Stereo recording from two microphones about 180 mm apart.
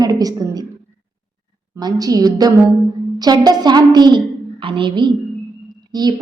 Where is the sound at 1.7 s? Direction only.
20° right (ahead or behind).